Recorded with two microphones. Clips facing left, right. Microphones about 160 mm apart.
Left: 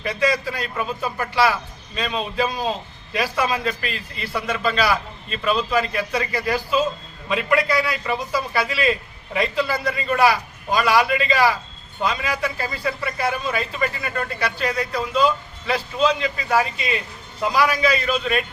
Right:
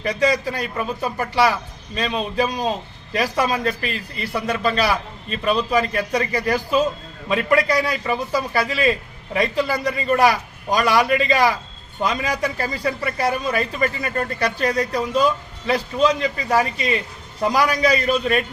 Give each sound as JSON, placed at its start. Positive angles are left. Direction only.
{"t": 0.0, "sound": "a man's voice", "side_deg": -40}